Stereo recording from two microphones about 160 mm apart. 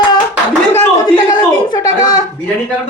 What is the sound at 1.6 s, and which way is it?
Speech, 25° left (ahead or behind).